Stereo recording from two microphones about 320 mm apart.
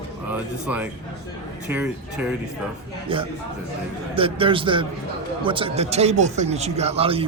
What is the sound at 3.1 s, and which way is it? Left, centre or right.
A man's voice, centre.